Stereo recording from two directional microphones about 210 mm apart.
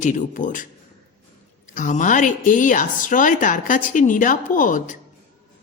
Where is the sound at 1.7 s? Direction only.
35° left (ahead or behind).